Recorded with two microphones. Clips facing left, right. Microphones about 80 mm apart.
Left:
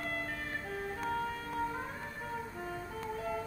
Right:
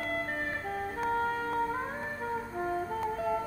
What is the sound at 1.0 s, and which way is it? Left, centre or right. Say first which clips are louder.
Music: right 8 dB; right.